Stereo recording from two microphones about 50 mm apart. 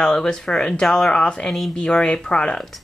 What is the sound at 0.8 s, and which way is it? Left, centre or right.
Speech, centre.